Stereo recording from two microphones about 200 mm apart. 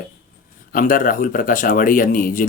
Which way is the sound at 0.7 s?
45° left (ahead or behind).